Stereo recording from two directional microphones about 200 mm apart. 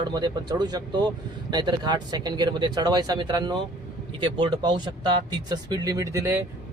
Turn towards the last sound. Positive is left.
turn(degrees=-15)  # may be behind; listen again after turning